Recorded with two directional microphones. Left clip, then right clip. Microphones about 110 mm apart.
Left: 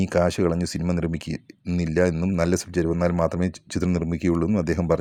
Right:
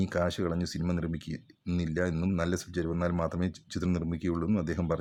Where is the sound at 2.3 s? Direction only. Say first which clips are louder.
Left 10 dB; 45° left (ahead or behind).